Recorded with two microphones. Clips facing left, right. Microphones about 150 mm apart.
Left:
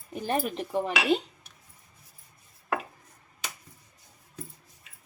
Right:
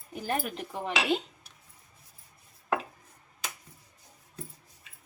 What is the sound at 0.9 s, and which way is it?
Speech, 5° left (ahead or behind).